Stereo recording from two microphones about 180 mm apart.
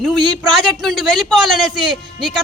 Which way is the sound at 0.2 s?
25° right (ahead or behind).